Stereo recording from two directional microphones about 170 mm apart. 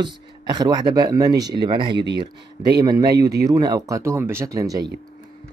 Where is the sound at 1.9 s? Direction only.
90° right.